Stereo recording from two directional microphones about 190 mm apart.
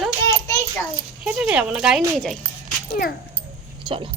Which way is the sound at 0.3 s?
15° left (ahead or behind).